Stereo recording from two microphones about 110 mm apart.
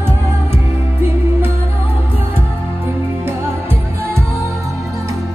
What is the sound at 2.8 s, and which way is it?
Music, 20° right (ahead or behind).